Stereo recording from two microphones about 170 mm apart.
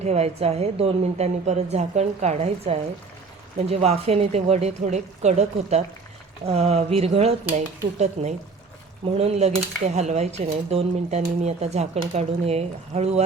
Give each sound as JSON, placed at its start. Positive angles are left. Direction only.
{"t": 0.0, "sound": "speech", "side_deg": -40}